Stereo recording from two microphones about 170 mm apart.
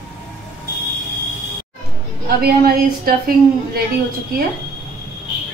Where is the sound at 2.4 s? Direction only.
60° right (ahead or behind).